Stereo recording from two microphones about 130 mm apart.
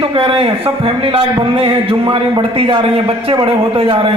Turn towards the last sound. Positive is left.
turn(degrees=-40)  # may be behind; listen again after turning